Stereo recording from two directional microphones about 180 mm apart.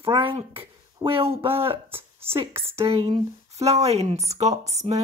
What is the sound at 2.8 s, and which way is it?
Speech, 35° right (ahead or behind).